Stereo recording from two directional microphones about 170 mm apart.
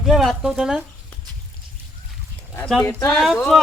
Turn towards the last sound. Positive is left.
turn(degrees=-5)  # may be behind; listen again after turning